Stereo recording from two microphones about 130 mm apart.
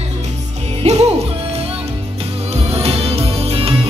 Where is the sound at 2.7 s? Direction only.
50° right (ahead or behind).